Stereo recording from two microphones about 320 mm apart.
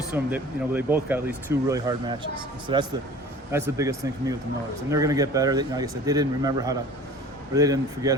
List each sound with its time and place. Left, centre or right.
0.1 s speech: centre